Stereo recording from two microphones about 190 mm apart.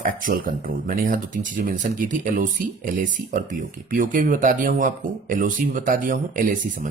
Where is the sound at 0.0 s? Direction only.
45° right (ahead or behind).